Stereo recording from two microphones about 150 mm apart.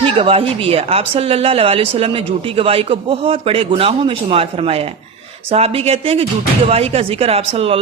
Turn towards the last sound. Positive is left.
turn(degrees=-40)  # may be behind; listen again after turning